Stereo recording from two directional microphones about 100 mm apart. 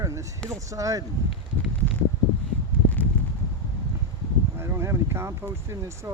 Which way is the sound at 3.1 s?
15° left (ahead or behind).